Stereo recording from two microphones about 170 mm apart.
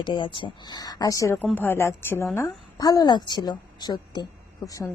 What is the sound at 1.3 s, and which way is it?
A woman's voice, 10° left (ahead or behind).